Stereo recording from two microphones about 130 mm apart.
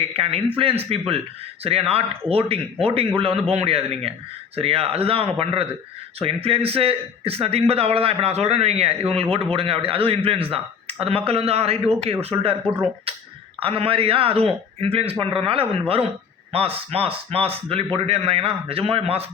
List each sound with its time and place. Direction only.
0.1 s a man's voice: 50° right (ahead or behind)
13.6 s a man's voice: 45° right (ahead or behind)